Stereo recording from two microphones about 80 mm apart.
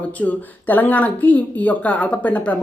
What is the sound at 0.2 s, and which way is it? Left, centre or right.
Speech, left.